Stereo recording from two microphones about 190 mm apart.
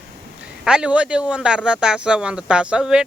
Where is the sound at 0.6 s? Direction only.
5° right (ahead or behind).